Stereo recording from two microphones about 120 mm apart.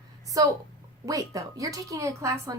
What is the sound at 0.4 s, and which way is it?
A woman's voice, 30° right (ahead or behind).